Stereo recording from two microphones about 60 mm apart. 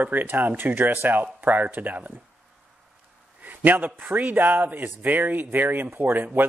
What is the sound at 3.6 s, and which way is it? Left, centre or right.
Speech, right.